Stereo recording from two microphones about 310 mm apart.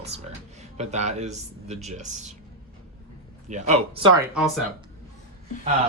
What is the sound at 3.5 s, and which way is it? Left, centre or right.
Speech, centre.